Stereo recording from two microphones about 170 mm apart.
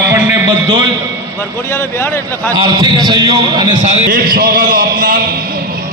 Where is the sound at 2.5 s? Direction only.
25° right (ahead or behind).